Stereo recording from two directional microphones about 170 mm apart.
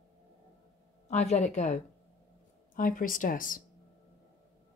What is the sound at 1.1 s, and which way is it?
Speech, 40° left (ahead or behind).